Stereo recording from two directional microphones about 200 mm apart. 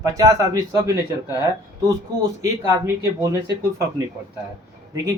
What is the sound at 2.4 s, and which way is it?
Speech, 15° right (ahead or behind).